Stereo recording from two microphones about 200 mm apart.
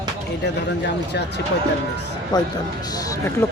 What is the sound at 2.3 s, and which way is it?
Speech, 20° left (ahead or behind).